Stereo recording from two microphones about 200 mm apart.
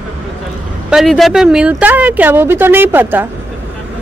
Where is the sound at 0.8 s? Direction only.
Centre (ahead or behind).